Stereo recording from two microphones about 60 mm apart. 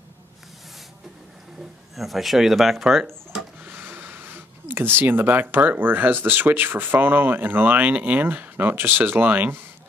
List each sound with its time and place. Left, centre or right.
2.0 s speech: centre
3.6 s speech: right